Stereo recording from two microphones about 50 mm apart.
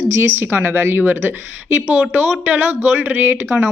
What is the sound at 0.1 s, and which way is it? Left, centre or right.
Speech, right.